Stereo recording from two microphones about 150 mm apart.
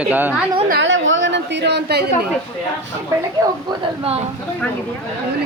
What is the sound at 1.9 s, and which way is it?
Speech, 90° right.